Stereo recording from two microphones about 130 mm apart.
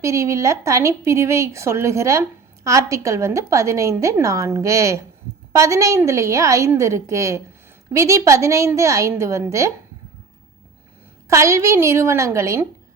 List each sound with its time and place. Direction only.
0.0 s a woman's voice: 20° right (ahead or behind)
11.3 s a woman's voice: 20° right (ahead or behind)